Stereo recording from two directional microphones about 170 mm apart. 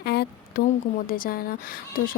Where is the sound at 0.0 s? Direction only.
70° left (ahead or behind).